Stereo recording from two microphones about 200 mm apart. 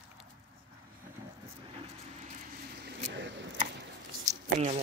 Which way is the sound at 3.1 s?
65° right (ahead or behind).